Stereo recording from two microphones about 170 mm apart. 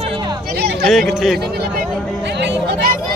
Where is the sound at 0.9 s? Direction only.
Centre (ahead or behind).